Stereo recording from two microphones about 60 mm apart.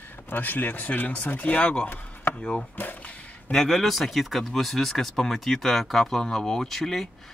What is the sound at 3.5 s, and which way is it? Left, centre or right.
Speech, centre.